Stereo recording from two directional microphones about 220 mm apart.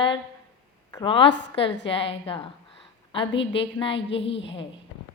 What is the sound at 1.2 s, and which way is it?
Speech, 55° left (ahead or behind).